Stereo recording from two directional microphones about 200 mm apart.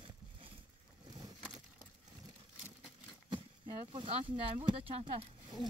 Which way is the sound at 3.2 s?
25° right (ahead or behind).